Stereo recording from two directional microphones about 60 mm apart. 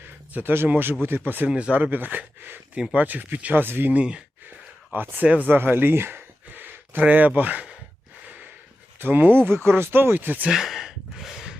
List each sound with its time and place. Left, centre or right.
0.3 s speech: right
1.5 s speech: centre
1.7 s speech: right
3.9 s speech: centre
4.9 s speech: right
5.5 s a sound: right
7.0 s speech: right
9.0 s speech: right
10.5 s a sound: centre